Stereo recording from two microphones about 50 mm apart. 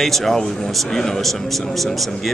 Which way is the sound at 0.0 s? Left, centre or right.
Centre.